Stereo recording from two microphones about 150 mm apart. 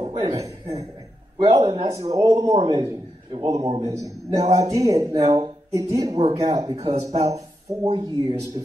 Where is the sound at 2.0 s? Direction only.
25° right (ahead or behind).